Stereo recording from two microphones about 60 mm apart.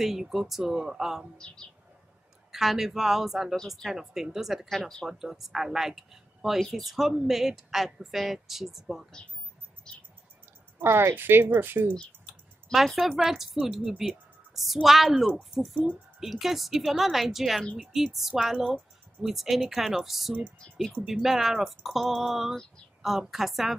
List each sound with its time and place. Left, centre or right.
0.0 s speech: centre
1.4 s speech: centre
2.5 s speech: centre
5.0 s speech: centre
9.9 s a sound: centre
10.8 s a woman's voice: right
12.7 s speech: centre